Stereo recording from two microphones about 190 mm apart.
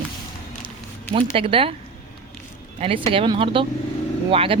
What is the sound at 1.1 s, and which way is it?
Speech, 30° right (ahead or behind).